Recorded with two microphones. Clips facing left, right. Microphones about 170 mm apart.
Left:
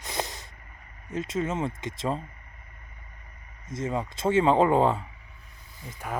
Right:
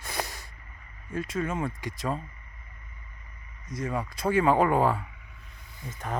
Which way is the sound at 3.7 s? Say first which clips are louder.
Left 2 dB; 25° left (ahead or behind).